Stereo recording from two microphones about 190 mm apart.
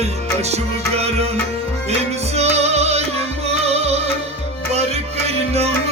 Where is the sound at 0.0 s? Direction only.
35° right (ahead or behind).